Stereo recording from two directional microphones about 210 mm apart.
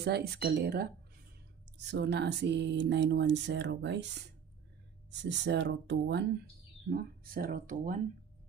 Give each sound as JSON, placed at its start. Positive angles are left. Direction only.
{"t": 0.0, "sound": "speech", "side_deg": -50}